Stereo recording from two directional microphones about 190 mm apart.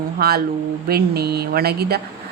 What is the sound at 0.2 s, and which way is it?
A woman's voice, 55° right (ahead or behind).